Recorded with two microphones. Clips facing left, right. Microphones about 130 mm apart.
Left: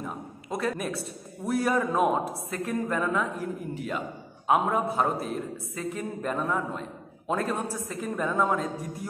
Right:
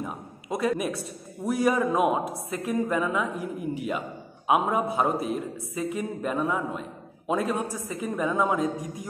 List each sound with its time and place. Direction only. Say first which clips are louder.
0.0 s a man's voice: right 1 dB; 15° right (ahead or behind)